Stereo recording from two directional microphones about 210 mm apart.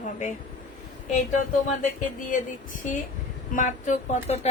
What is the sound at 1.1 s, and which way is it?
Speech, 35° left (ahead or behind).